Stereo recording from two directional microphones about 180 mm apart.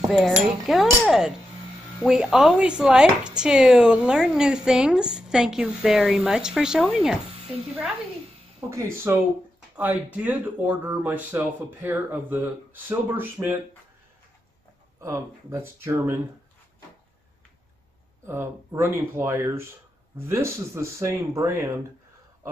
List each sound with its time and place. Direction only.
0.1 s speech: centre (ahead or behind)
1.0 s a sound: centre (ahead or behind)
2.0 s speech: 5° right (ahead or behind)
8.6 s speech: 15° right (ahead or behind)
15.0 s speech: 15° right (ahead or behind)
18.2 s speech: 15° right (ahead or behind)